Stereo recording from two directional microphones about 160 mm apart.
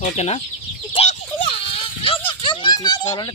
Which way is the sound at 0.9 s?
35° left (ahead or behind).